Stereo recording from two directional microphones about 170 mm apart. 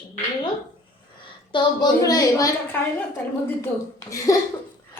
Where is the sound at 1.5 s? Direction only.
25° left (ahead or behind).